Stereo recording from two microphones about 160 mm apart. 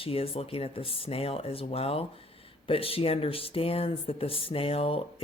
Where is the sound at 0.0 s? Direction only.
35° left (ahead or behind).